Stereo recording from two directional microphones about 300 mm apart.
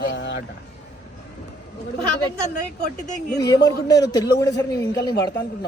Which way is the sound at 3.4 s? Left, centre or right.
Centre.